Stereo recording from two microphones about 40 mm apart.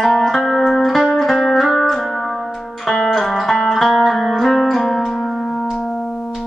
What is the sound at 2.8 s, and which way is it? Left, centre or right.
Music, centre.